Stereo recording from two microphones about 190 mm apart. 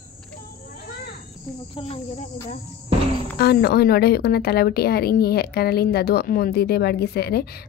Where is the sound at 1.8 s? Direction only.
35° left (ahead or behind).